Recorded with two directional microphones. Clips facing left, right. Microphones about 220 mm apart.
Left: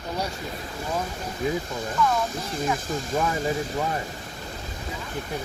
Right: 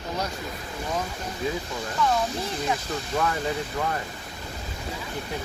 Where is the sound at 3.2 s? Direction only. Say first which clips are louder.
Left 1 dB; 15° left (ahead or behind).